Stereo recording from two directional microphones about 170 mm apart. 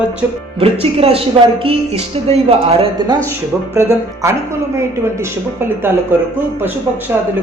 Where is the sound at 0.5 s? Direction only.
35° right (ahead or behind).